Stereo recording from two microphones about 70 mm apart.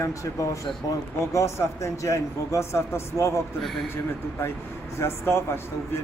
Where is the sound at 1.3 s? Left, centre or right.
Left.